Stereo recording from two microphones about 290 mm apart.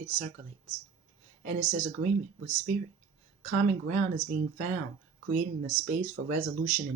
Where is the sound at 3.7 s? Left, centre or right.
Right.